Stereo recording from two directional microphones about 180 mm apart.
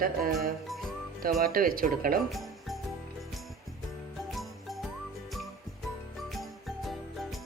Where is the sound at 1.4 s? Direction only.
55° right (ahead or behind).